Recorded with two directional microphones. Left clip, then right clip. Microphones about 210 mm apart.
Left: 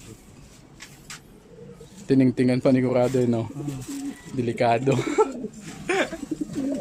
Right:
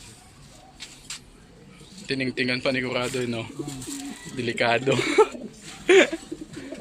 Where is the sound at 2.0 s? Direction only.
25° left (ahead or behind); by 5.4 s 5° left (ahead or behind).